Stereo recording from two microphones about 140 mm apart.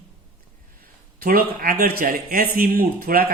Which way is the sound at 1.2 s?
90° right.